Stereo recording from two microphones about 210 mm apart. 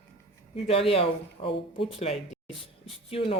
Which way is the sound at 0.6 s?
25° left (ahead or behind).